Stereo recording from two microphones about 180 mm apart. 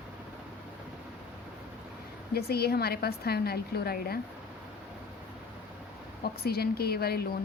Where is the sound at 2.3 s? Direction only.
60° left (ahead or behind).